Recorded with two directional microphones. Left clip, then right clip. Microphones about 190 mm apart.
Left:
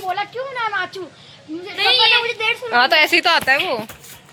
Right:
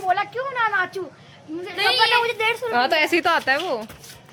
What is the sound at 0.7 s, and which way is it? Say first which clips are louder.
Speech: right 1 dB; 40° left (ahead or behind).